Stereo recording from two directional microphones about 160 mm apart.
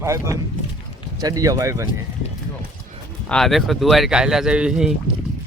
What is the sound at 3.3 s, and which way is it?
Speech, 5° left (ahead or behind).